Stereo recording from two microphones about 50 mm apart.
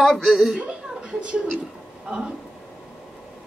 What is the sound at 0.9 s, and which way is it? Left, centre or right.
Speech, centre.